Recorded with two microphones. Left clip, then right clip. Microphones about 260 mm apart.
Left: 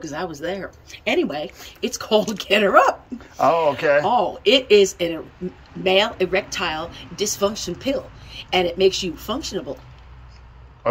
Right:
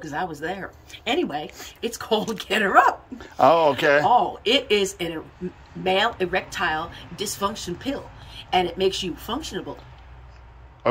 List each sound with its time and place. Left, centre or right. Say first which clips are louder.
0.0 s speech: left 1 dB; centre
3.2 s speech: right 2 dB; right
4.2 s speech: left 4 dB; centre